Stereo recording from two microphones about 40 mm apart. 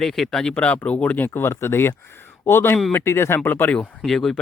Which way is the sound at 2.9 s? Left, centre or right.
Left.